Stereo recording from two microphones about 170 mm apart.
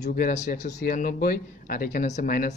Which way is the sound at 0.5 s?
50° left (ahead or behind).